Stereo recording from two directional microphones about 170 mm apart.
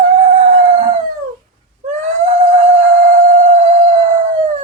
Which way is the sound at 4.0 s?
45° right (ahead or behind).